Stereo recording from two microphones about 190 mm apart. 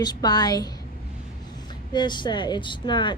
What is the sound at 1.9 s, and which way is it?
Speech, 25° left (ahead or behind).